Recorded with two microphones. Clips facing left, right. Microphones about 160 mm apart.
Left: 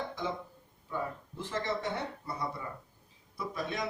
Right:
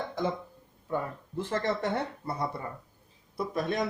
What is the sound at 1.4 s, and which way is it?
Speech, 55° right (ahead or behind).